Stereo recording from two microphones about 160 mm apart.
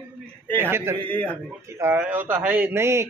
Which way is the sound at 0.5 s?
15° right (ahead or behind).